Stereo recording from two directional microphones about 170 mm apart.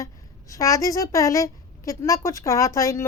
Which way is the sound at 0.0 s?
20° left (ahead or behind).